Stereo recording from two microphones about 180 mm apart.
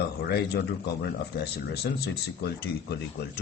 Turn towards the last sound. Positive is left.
turn(degrees=65)  # may be behind; listen again after turning